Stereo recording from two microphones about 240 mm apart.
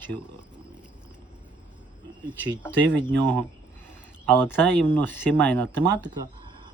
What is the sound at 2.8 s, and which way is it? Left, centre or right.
Speech, right.